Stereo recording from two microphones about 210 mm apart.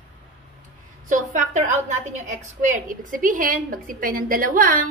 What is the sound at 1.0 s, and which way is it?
A woman's voice, 35° right (ahead or behind).